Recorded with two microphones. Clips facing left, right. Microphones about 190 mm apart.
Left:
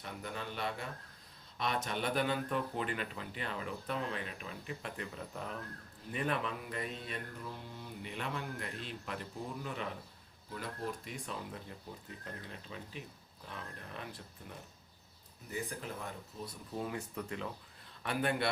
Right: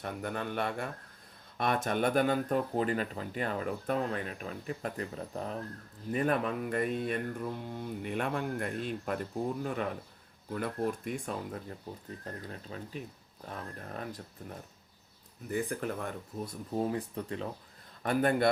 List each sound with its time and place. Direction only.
0.0 s a man's voice: 55° right (ahead or behind); by 14.6 s 40° right (ahead or behind)
15.5 s speech: 55° right (ahead or behind); by 17.5 s 35° right (ahead or behind)
18.0 s speech: 45° right (ahead or behind)